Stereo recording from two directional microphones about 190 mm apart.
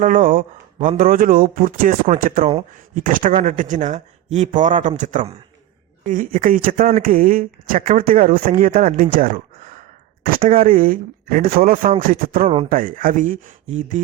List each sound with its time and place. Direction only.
0.0 s speech: 45° right (ahead or behind)
10.3 s speech: 50° right (ahead or behind)